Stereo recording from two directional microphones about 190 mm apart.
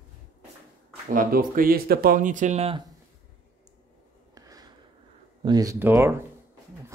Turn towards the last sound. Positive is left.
turn(degrees=-10)  # may be behind; listen again after turning